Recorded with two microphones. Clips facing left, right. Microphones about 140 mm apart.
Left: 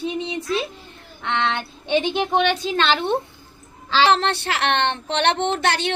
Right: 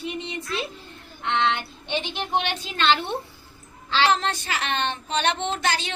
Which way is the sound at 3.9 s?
85° left.